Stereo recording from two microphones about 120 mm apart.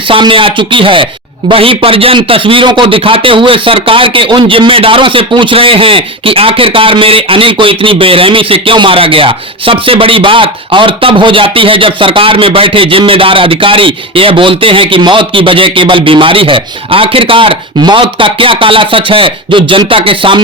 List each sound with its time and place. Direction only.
0.1 s speech: 45° right (ahead or behind)